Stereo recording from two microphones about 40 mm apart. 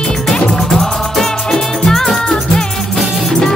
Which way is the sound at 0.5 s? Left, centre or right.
Centre.